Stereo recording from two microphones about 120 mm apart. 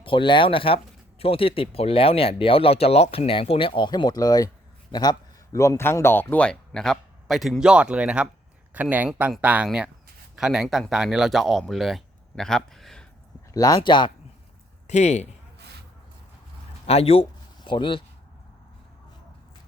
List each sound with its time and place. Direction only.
0.0 s speech: 45° left (ahead or behind); by 13.1 s 5° left (ahead or behind)
13.5 s speech: 30° left (ahead or behind)
14.8 s speech: 70° left (ahead or behind)
16.8 s speech: 55° left (ahead or behind)
17.6 s speech: 45° left (ahead or behind)